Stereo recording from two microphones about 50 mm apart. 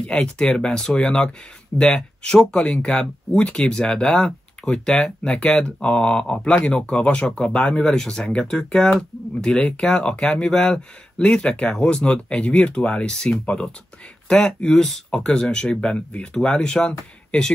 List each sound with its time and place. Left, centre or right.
0.0 s speech: left